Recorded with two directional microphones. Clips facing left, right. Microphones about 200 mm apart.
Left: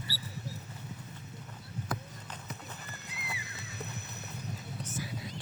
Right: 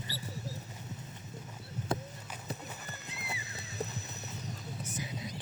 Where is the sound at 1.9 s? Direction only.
25° right (ahead or behind).